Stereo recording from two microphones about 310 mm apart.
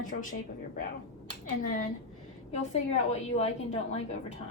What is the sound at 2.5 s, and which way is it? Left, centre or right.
A woman's voice, left.